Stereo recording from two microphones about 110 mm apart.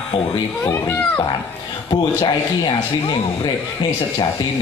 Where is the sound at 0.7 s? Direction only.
20° left (ahead or behind).